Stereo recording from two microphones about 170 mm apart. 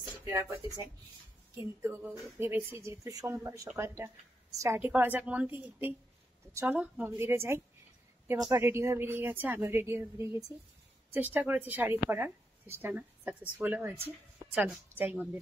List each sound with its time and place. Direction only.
0.1 s speech: 15° right (ahead or behind)
1.6 s a woman's voice: 15° right (ahead or behind)